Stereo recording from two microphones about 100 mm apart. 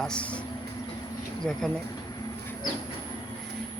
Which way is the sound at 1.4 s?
5° left (ahead or behind).